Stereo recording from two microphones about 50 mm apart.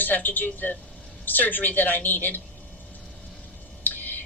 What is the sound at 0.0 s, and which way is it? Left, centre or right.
A woman's voice, left.